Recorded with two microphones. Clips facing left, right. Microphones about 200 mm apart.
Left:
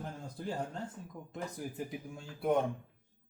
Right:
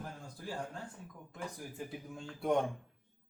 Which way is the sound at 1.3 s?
15° left (ahead or behind).